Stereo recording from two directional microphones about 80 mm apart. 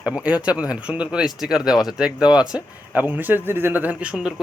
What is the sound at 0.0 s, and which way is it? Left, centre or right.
Speech, centre.